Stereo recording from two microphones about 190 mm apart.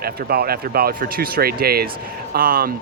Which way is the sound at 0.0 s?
55° right (ahead or behind).